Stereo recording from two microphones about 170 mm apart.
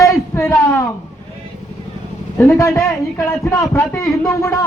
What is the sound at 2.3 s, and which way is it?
A man's voice, 15° left (ahead or behind).